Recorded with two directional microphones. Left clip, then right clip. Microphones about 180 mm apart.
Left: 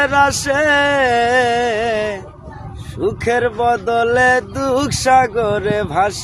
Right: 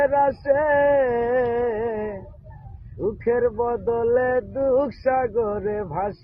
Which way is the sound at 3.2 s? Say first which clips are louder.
Left 6 dB; 35° left (ahead or behind).